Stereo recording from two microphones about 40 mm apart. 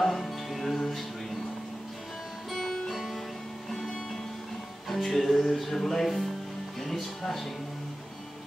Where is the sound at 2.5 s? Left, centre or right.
Centre.